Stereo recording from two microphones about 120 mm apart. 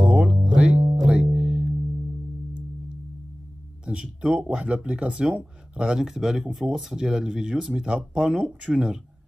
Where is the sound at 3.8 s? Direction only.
10° right (ahead or behind).